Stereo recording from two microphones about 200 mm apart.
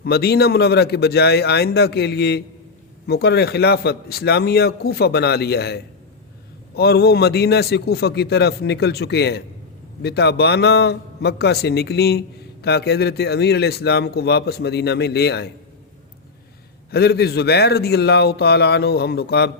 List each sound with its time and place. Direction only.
0.0 s a man's voice: 55° left (ahead or behind)
16.9 s speech: 55° left (ahead or behind)